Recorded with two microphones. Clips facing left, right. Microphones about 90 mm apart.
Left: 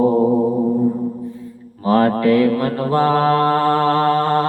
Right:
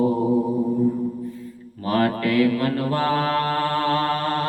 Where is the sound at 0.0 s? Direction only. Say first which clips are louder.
Left 6 dB; 45° left (ahead or behind).